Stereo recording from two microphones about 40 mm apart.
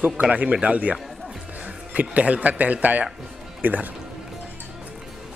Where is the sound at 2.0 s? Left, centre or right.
Right.